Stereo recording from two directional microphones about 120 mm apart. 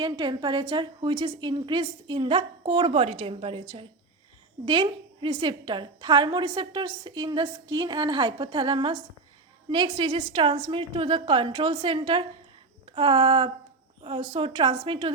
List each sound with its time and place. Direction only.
0.0 s a woman's voice: 40° right (ahead or behind)